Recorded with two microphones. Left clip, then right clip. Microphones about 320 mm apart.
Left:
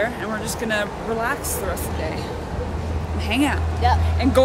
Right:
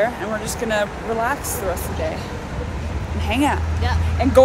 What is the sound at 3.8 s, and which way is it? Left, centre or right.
Speech, centre.